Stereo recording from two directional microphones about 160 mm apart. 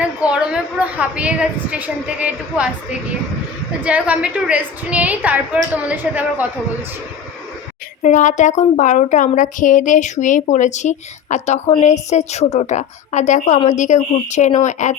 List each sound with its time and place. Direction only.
0.0 s a woman's voice: 5° right (ahead or behind)
3.8 s a woman's voice: 10° right (ahead or behind)
8.0 s a woman's voice: 50° left (ahead or behind)